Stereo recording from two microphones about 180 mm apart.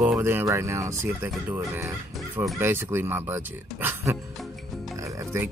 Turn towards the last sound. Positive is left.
turn(degrees=-15)  # may be behind; listen again after turning